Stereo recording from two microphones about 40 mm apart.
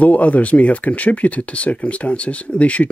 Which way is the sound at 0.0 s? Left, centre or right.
Left.